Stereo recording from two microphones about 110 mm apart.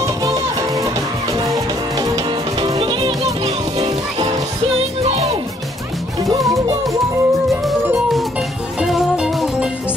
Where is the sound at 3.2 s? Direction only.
70° right (ahead or behind).